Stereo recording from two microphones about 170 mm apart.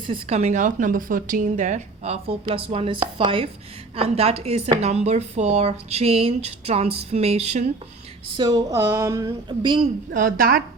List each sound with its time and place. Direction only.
0.1 s a woman's voice: 40° right (ahead or behind)
8.4 s speech: 25° right (ahead or behind)
10.1 s a woman's voice: 55° right (ahead or behind)